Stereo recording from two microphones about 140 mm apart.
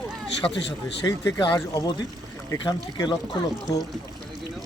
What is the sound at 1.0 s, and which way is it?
Speech, 20° left (ahead or behind).